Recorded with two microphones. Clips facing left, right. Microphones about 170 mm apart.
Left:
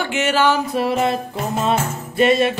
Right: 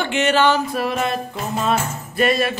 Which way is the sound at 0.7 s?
25° left (ahead or behind).